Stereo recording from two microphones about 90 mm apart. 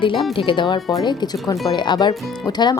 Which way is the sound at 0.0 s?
70° left (ahead or behind).